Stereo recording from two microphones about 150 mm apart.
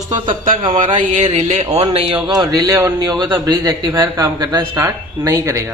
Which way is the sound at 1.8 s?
35° right (ahead or behind).